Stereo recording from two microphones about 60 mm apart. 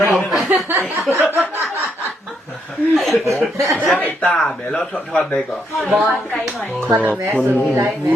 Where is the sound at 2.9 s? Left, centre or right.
Centre.